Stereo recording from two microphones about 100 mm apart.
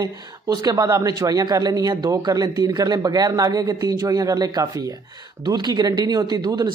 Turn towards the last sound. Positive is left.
turn(degrees=-40)  # may be behind; listen again after turning